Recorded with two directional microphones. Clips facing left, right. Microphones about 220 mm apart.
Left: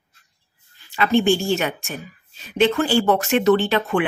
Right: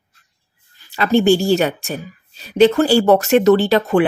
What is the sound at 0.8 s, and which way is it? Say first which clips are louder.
A woman's voice: right 4 dB; 40° right (ahead or behind).